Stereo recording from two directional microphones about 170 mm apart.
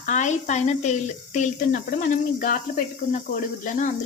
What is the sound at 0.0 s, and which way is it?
Speech, 45° left (ahead or behind).